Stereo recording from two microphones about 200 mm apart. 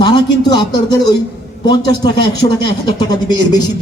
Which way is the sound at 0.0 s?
20° left (ahead or behind).